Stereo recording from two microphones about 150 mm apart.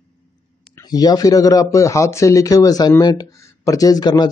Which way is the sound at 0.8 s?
25° left (ahead or behind).